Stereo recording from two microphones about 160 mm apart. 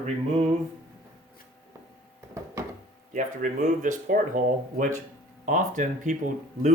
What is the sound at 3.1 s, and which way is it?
Speech, 50° right (ahead or behind).